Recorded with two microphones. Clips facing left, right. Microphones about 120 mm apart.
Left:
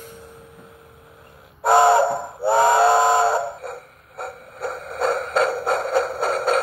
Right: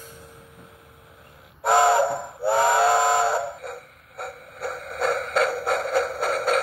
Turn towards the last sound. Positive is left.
turn(degrees=30)  # may be behind; listen again after turning